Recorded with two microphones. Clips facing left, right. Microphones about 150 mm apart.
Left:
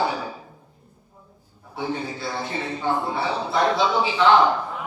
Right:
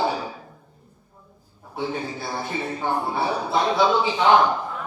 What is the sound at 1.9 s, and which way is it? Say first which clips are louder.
Speech: even; 55° right (ahead or behind).